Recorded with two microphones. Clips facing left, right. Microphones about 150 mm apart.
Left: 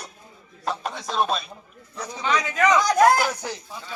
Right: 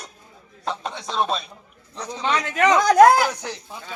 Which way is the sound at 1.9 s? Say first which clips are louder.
Right 2 dB; 10° left (ahead or behind).